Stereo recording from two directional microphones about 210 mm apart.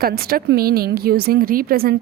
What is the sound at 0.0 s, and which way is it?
A woman's voice, 45° right (ahead or behind).